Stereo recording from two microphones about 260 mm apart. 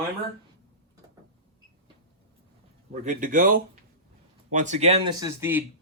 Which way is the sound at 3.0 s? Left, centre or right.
Right.